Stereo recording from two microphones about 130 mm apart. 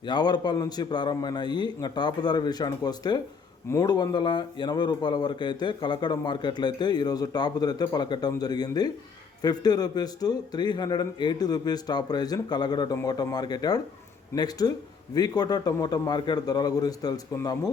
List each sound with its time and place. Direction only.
0.0 s speech: 35° left (ahead or behind)